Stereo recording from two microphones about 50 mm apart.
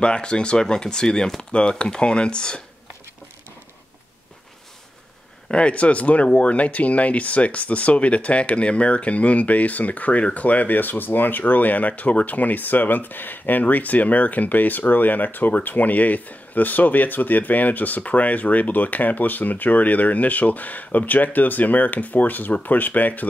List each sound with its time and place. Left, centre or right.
0.0 s speech: centre
5.5 s speech: left